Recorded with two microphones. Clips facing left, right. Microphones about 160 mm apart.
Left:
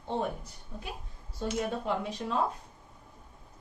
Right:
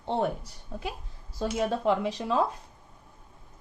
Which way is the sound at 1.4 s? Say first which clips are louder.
Right 5 dB; 90° right.